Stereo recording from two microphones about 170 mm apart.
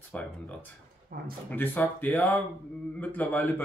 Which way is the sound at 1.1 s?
60° right (ahead or behind).